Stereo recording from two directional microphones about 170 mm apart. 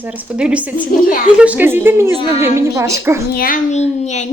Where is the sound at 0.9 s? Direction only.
60° left (ahead or behind).